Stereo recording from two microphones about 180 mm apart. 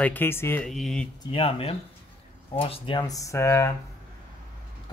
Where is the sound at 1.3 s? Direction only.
30° left (ahead or behind).